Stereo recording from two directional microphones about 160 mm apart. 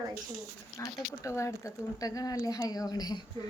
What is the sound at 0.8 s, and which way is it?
Speech, 20° left (ahead or behind).